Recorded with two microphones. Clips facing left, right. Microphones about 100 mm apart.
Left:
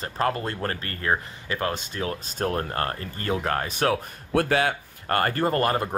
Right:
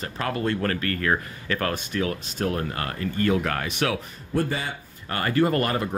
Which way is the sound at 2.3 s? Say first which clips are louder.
Left 2 dB; 40° left (ahead or behind).